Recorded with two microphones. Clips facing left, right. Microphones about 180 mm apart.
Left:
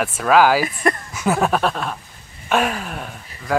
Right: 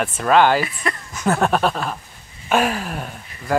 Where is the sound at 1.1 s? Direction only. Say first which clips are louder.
Right 4 dB; 5° left (ahead or behind).